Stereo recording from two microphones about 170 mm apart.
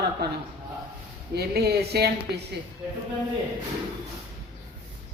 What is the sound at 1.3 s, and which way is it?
Speech, 70° right (ahead or behind).